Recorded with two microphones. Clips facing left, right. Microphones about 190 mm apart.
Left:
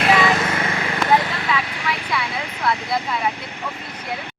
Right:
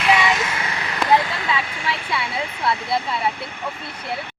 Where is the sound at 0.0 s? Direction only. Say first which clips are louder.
Left 2 dB; 50° left (ahead or behind).